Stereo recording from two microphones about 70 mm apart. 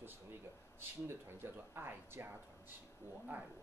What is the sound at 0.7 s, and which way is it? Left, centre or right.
Speech, right.